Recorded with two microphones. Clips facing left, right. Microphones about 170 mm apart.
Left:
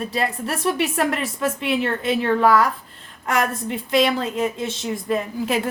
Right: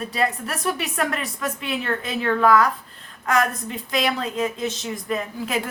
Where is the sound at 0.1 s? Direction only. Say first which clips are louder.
Even; 30° left (ahead or behind).